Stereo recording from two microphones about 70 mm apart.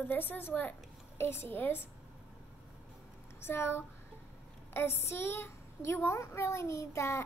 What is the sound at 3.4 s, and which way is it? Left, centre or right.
A child's voice, left.